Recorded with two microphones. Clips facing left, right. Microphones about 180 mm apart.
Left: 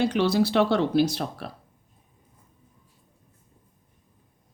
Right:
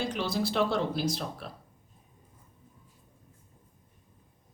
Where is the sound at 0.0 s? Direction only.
70° left (ahead or behind).